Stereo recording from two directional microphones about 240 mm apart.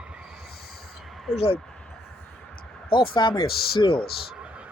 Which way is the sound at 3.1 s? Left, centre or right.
Centre.